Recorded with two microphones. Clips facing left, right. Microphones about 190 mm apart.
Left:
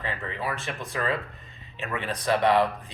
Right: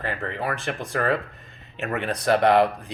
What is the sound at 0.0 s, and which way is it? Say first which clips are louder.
Speech: right 4 dB; 50° right (ahead or behind).